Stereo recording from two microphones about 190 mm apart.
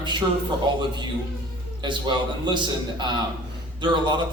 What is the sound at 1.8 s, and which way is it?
A man's voice, 25° right (ahead or behind).